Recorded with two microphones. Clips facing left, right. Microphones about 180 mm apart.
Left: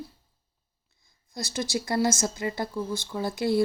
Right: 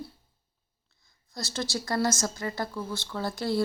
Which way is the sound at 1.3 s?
15° left (ahead or behind).